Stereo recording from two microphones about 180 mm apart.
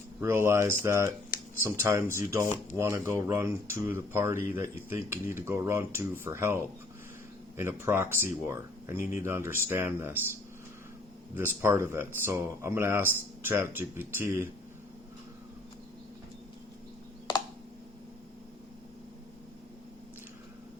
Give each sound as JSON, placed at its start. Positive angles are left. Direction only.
{"t": 0.2, "sound": "speech", "side_deg": -15}
{"t": 11.3, "sound": "speech", "side_deg": -15}